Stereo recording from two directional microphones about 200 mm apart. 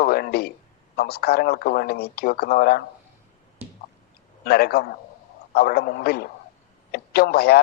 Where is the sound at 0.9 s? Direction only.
50° left (ahead or behind).